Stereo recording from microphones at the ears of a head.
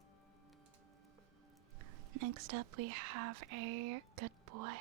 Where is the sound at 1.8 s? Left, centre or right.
Right.